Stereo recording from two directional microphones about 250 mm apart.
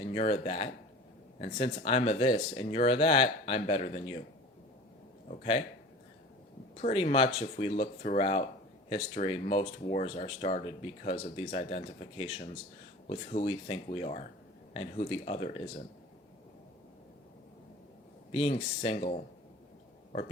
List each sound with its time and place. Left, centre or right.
0.1 s speech: left
6.8 s speech: left
18.3 s speech: left